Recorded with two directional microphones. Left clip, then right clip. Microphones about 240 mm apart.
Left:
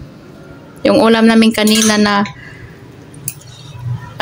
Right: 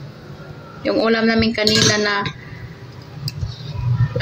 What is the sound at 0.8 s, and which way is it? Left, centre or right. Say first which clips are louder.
Speech: left 7 dB; left.